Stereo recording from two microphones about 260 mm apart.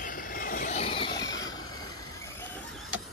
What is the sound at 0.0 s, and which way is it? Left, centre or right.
Vehicle, left.